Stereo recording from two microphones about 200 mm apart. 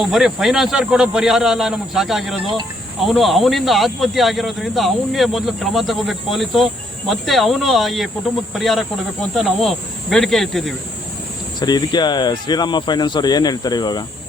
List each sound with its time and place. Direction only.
0.0 s speech: centre (ahead or behind)
11.6 s speech: 20° left (ahead or behind)